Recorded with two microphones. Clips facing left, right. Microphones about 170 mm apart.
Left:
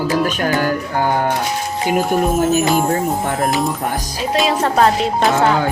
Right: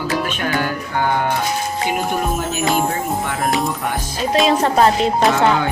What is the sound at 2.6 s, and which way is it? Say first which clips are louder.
Speech: left 3 dB; centre (ahead or behind).